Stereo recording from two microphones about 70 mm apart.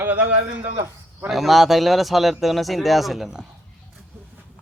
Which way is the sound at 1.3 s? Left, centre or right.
Centre.